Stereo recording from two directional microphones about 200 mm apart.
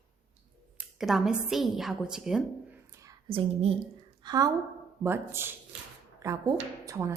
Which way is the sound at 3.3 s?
30° right (ahead or behind).